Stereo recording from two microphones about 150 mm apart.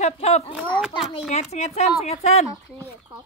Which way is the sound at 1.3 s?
50° left (ahead or behind).